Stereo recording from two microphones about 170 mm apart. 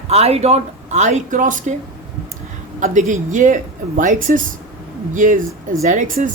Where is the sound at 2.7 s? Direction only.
50° right (ahead or behind).